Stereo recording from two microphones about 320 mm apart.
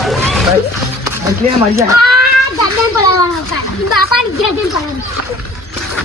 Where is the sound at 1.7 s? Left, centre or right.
Centre.